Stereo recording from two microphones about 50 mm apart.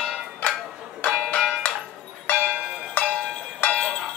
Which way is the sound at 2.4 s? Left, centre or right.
Left.